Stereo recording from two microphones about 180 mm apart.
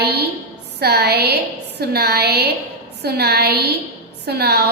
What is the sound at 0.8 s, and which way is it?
A woman's voice, 60° right (ahead or behind).